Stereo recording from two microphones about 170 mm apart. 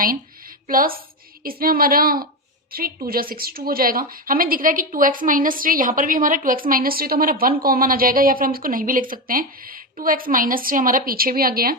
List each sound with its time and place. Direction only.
0.7 s a woman's voice: 55° right (ahead or behind)